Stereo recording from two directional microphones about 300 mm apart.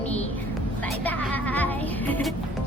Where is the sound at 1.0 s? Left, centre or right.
Centre.